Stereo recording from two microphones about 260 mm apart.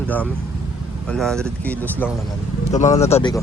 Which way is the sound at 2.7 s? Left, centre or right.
Left.